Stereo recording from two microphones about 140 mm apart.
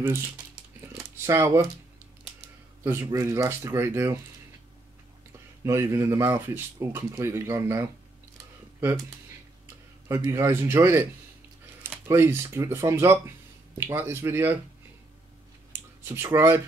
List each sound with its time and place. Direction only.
1.1 s speech: 20° right (ahead or behind)
2.8 s speech: 15° right (ahead or behind)
5.6 s speech: 20° right (ahead or behind)
10.0 s speech: 20° right (ahead or behind)
15.7 s a sound: 15° right (ahead or behind)